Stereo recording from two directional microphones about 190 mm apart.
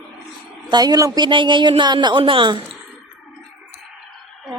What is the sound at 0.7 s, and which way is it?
Speech, 20° right (ahead or behind).